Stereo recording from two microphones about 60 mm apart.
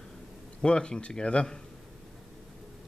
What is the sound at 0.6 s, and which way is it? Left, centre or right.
A man's voice, centre.